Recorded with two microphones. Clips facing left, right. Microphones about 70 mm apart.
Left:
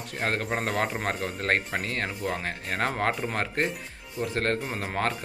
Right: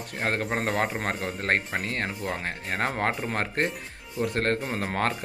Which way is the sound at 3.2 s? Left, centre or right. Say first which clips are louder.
Even; right.